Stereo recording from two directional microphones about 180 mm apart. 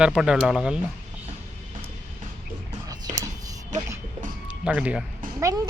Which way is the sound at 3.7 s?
45° right (ahead or behind).